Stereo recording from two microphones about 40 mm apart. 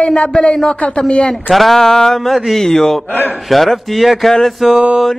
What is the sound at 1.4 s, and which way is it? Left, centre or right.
Speech, centre.